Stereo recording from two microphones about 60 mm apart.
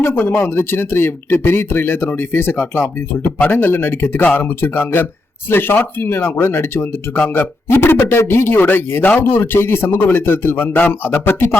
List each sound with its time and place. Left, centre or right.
0.0 s a man's voice: left